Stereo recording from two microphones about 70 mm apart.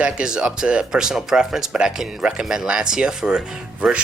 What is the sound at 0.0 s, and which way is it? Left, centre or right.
Speech, centre.